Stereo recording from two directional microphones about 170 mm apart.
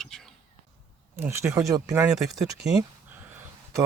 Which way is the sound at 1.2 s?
15° right (ahead or behind).